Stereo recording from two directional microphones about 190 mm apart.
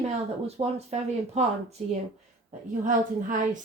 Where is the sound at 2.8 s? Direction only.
45° right (ahead or behind).